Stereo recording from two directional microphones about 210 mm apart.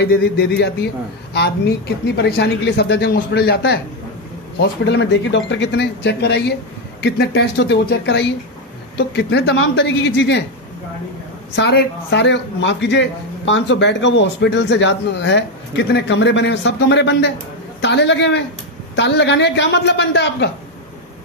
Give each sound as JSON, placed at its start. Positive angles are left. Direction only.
{"t": 0.0, "sound": "a woman's voice", "side_deg": 50}
{"t": 11.5, "sound": "speech", "side_deg": 55}